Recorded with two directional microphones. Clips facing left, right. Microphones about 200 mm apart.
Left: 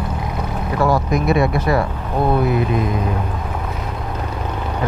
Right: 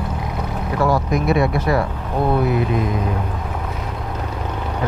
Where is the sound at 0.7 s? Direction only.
25° left (ahead or behind).